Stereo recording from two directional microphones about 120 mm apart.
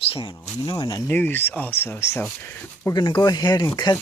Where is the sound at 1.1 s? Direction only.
15° left (ahead or behind).